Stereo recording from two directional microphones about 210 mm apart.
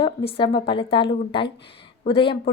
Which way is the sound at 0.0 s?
25° left (ahead or behind).